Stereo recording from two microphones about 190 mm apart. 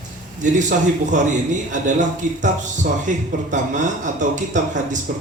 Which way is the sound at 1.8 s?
40° right (ahead or behind).